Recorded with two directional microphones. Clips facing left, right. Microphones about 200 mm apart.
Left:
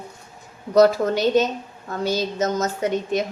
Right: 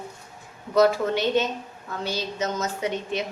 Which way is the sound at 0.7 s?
40° left (ahead or behind).